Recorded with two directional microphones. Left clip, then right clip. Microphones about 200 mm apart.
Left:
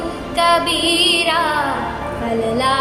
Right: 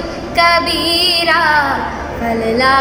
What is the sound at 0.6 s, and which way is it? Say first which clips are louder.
Female singing: right 1 dB; 50° left (ahead or behind).